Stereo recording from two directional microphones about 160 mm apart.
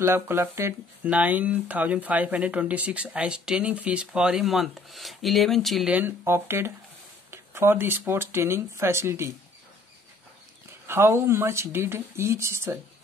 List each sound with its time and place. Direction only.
0.0 s speech: 15° right (ahead or behind)
10.9 s speech: 15° right (ahead or behind)